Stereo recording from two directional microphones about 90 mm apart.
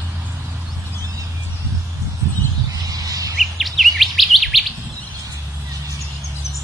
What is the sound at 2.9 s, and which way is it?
Bird, 40° right (ahead or behind).